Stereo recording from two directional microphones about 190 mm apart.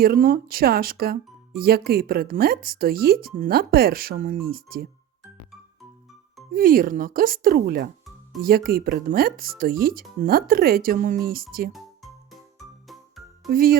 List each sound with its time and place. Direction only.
0.0 s speech: 50° right (ahead or behind)
6.5 s speech: 50° right (ahead or behind)
11.7 s music: centre (ahead or behind)
13.5 s speech: 50° right (ahead or behind)